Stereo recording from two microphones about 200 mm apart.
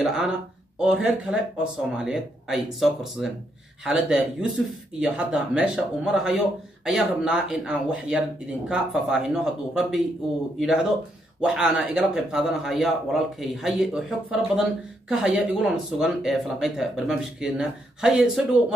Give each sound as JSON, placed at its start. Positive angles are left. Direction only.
{"t": 0.7, "sound": "a man's voice", "side_deg": -5}